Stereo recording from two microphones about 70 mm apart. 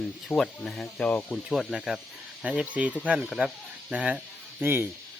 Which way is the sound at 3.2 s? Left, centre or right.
Centre.